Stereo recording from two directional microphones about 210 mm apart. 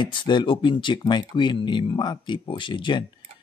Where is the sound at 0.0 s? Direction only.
20° left (ahead or behind).